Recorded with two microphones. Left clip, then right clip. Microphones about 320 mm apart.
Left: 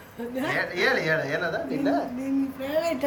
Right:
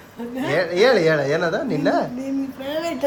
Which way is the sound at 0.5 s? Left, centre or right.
Centre.